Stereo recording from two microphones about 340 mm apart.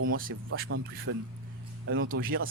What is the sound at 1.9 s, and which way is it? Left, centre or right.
Speech, right.